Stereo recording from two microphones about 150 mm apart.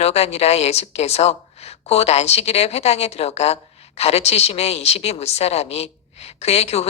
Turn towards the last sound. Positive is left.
turn(degrees=45)  # may be behind; listen again after turning